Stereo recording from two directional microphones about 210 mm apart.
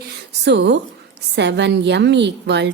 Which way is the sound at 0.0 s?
50° right (ahead or behind).